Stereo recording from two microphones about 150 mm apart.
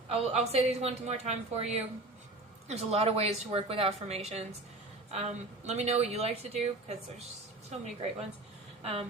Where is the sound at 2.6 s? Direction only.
45° right (ahead or behind).